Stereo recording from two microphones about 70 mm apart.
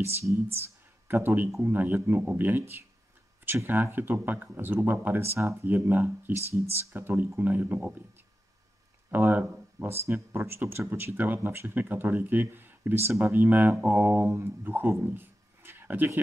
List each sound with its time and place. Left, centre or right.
0.0 s speech: right
6.3 s speech: right
6.9 s speech: right
9.1 s speech: right